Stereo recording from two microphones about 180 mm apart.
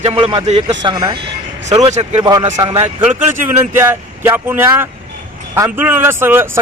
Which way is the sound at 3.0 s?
10° right (ahead or behind).